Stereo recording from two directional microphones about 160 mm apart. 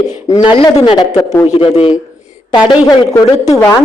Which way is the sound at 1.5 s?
40° left (ahead or behind).